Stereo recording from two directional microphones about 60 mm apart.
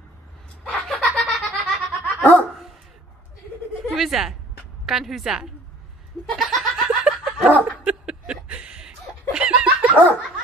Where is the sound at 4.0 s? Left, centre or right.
Centre.